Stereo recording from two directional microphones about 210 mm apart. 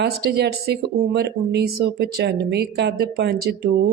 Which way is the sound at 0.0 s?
50° right (ahead or behind).